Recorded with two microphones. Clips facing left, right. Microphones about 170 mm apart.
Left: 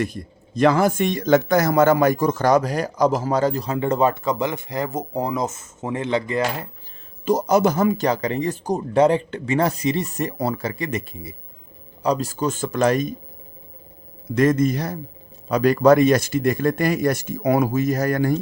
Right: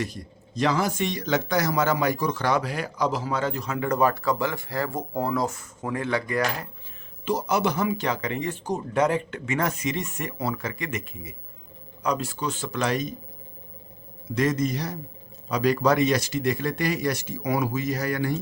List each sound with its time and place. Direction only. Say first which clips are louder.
0.0 s speech: left 6 dB; 55° left (ahead or behind); by 6.7 s 25° left (ahead or behind)
7.3 s speech: left 7 dB; 45° left (ahead or behind)
14.3 s speech: left 6 dB; 55° left (ahead or behind)